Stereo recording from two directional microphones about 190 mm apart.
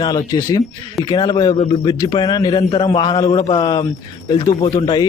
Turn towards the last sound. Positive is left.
turn(degrees=25)  # may be behind; listen again after turning